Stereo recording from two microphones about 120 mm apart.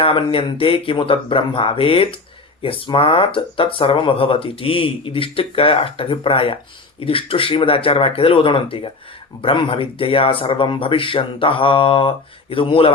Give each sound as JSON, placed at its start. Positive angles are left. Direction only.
{"t": 0.0, "sound": "speech", "side_deg": 50}